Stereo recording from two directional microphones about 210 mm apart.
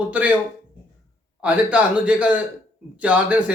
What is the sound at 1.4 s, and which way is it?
Speech, 5° right (ahead or behind).